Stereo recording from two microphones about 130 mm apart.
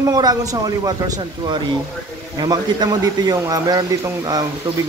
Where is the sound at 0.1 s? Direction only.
30° right (ahead or behind).